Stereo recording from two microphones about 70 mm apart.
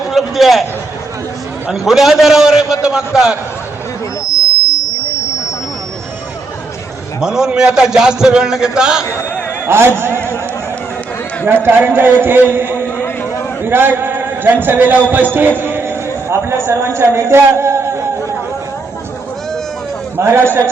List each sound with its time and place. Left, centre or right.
0.1 s a man's voice: centre
1.7 s a man's voice: centre
7.2 s a man's voice: centre
9.6 s a man's voice: right
11.4 s a man's voice: right
20.1 s a man's voice: right